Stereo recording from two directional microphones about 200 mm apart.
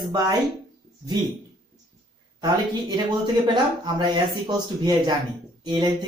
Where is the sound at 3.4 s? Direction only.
20° right (ahead or behind).